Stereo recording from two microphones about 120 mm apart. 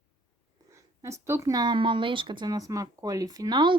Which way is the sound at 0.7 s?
25° right (ahead or behind).